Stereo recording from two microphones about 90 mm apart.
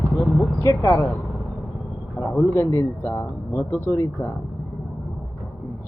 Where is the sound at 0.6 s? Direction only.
35° left (ahead or behind).